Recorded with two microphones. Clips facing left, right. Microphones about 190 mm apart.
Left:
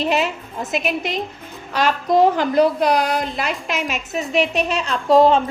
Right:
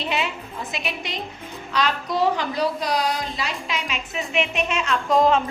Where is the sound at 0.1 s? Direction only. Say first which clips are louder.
Left 6 dB; 45° left (ahead or behind).